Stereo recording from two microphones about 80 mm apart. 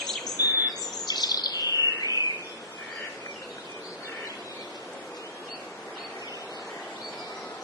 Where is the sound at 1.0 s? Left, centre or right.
Left.